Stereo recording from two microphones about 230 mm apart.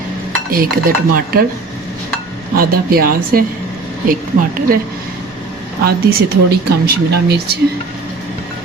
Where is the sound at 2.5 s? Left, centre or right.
Right.